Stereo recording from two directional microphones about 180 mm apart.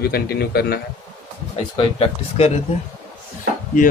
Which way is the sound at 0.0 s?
60° left (ahead or behind).